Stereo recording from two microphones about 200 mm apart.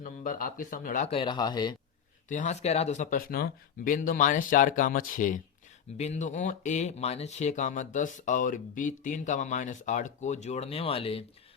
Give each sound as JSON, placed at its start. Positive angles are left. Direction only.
{"t": 0.0, "sound": "speech", "side_deg": 40}
{"t": 2.3, "sound": "speech", "side_deg": 35}